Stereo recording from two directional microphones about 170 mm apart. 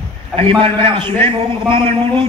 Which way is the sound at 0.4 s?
30° right (ahead or behind).